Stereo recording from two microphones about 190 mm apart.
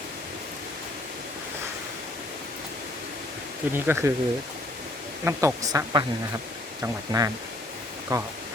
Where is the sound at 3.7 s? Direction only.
10° right (ahead or behind).